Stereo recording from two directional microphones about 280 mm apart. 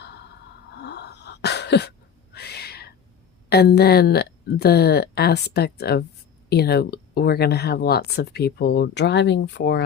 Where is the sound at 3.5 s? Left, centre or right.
Left.